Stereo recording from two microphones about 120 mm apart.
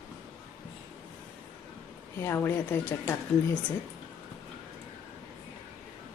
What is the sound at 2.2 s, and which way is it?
Speech, 20° left (ahead or behind).